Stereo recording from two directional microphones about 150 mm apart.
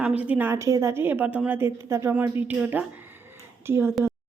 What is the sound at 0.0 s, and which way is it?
A woman's voice, 10° right (ahead or behind).